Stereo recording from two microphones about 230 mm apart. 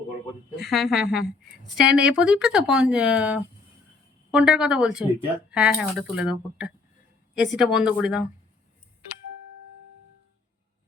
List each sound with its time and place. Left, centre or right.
0.5 s speech: centre